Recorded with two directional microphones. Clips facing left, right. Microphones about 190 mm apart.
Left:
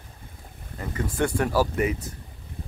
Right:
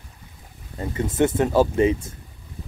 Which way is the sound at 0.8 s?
25° right (ahead or behind).